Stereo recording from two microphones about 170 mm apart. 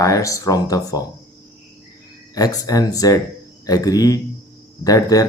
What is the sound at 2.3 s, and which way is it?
Speech, 20° left (ahead or behind).